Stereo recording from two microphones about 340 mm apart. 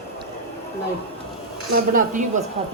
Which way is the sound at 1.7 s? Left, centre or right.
Right.